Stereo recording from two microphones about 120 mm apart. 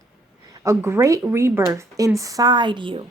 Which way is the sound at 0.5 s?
25° right (ahead or behind).